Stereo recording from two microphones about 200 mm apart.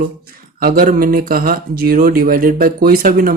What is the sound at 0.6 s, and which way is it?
Speech, 45° right (ahead or behind).